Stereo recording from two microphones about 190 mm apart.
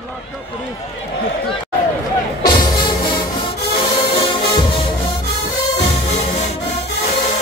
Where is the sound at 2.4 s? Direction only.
20° left (ahead or behind).